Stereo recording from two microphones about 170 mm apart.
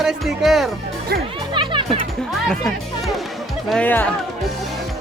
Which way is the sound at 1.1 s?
65° right (ahead or behind).